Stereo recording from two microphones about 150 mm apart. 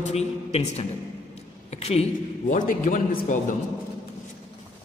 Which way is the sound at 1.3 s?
45° left (ahead or behind).